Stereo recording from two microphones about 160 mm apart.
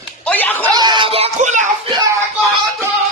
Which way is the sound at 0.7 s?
25° right (ahead or behind).